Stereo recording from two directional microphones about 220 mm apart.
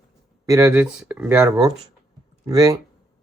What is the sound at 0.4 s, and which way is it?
Speech, 15° right (ahead or behind).